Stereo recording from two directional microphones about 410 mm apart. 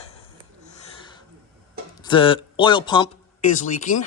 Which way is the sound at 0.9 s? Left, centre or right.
Centre.